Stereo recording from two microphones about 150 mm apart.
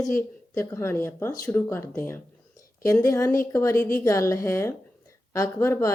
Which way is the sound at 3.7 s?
70° left (ahead or behind).